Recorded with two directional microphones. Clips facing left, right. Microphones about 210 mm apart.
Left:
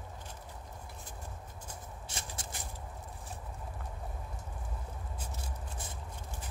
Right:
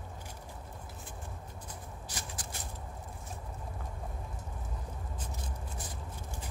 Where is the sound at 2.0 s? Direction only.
25° left (ahead or behind).